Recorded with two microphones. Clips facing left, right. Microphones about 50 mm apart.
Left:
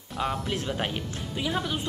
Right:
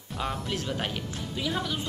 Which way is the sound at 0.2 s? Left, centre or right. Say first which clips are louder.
Left 3 dB; centre.